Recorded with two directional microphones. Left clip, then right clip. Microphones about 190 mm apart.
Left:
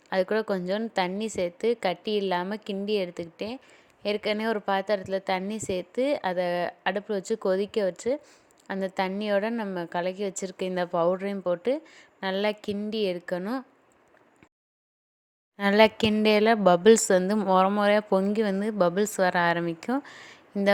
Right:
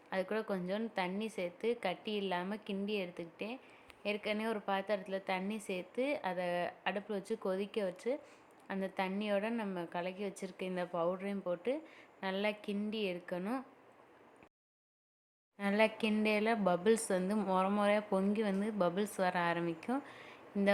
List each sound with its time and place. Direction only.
0.1 s a woman's voice: 40° left (ahead or behind)
15.5 s a woman's voice: 45° left (ahead or behind)